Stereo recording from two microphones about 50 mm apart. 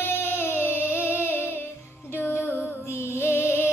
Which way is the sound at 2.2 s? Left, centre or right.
Left.